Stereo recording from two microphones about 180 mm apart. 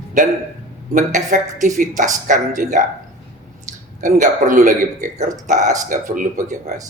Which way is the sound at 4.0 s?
45° right (ahead or behind).